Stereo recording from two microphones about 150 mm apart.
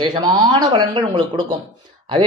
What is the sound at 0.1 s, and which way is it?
Speech, 30° right (ahead or behind).